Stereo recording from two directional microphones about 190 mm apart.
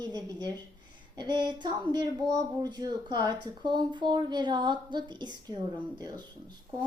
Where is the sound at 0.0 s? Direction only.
20° right (ahead or behind).